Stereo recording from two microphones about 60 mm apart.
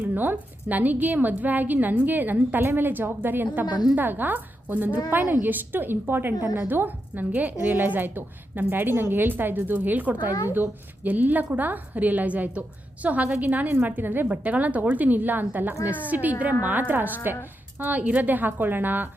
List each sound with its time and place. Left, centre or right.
0.0 s a woman's voice: right
14.3 s a woman's voice: right